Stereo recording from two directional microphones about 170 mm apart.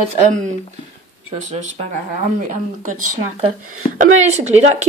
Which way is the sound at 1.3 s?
40° right (ahead or behind).